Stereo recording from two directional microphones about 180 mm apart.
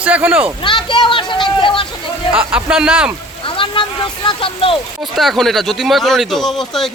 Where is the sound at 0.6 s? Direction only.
25° left (ahead or behind).